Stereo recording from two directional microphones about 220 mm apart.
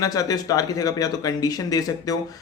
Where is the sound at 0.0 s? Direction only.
15° left (ahead or behind).